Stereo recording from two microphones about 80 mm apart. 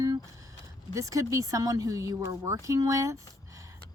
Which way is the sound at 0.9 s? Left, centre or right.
Right.